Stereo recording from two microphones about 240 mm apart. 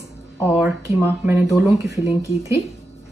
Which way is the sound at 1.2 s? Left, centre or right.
Centre.